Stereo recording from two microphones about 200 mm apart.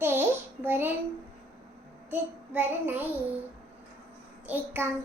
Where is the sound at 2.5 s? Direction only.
10° right (ahead or behind).